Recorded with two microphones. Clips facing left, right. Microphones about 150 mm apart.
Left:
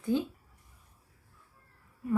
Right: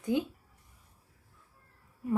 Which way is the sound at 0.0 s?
15° right (ahead or behind).